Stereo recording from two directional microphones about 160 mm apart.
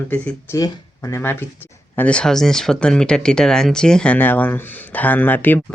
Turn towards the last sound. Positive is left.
turn(degrees=10)  # may be behind; listen again after turning